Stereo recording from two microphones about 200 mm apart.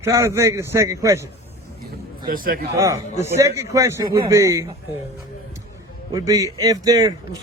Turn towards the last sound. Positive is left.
turn(degrees=-20)  # may be behind; listen again after turning